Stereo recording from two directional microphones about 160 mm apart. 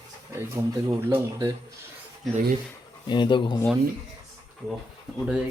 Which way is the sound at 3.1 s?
30° left (ahead or behind).